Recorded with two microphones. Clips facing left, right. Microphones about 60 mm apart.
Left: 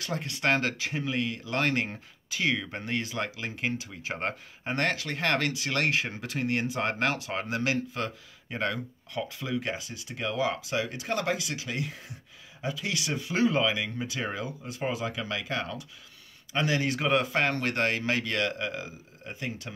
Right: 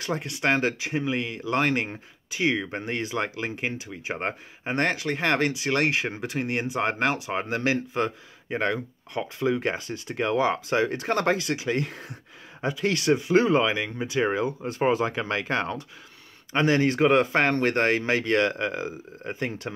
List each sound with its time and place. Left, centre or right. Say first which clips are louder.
0.0 s speech: right 3 dB; right
7.4 s speech: right 2 dB; right
14.6 s speech: right 8 dB; right